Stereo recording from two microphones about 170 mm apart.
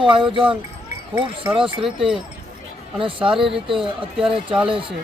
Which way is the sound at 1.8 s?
Centre (ahead or behind).